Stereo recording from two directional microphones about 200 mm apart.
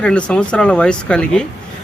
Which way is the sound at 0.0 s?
5° left (ahead or behind).